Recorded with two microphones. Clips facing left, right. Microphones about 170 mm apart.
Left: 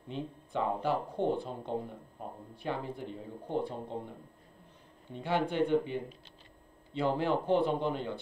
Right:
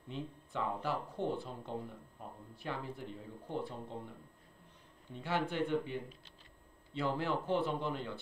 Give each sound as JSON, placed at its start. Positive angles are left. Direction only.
{"t": 0.1, "sound": "speech", "side_deg": 25}
{"t": 6.9, "sound": "speech", "side_deg": 20}